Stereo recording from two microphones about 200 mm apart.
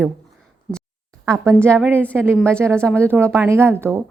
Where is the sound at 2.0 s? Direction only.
5° left (ahead or behind).